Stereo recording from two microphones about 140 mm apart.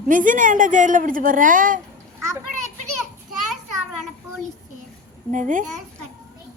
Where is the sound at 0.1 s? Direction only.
70° right (ahead or behind).